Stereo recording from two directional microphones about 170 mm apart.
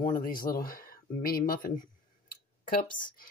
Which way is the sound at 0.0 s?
55° left (ahead or behind).